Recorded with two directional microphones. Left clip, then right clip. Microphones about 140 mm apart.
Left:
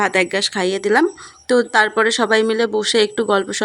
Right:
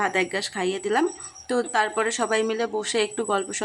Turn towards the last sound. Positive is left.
turn(degrees=30)  # may be behind; listen again after turning